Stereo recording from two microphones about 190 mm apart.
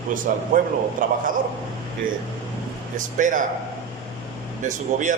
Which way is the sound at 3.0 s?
45° right (ahead or behind).